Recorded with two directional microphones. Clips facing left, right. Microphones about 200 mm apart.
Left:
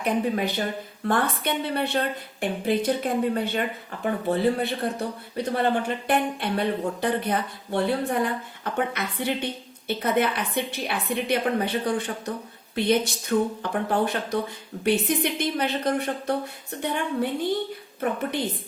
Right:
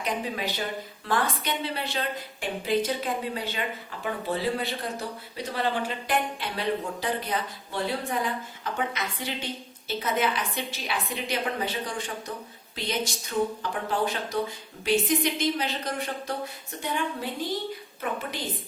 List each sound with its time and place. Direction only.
0.0 s speech: 55° left (ahead or behind)